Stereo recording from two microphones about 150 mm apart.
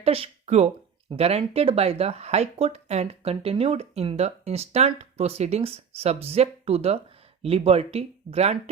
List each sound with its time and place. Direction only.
0.0 s speech: 40° right (ahead or behind)